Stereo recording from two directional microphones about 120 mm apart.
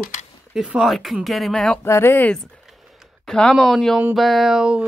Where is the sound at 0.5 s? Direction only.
5° right (ahead or behind).